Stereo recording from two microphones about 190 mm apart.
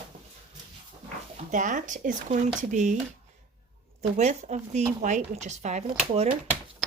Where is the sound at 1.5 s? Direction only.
40° right (ahead or behind).